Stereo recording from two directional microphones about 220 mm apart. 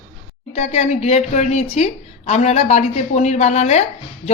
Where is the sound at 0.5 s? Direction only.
30° left (ahead or behind).